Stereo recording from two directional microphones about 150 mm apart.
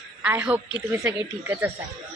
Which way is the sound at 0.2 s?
10° right (ahead or behind).